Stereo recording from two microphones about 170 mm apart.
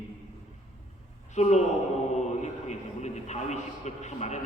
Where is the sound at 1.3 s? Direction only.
40° left (ahead or behind).